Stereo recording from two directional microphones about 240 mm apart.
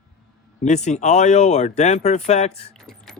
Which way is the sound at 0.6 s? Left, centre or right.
Left.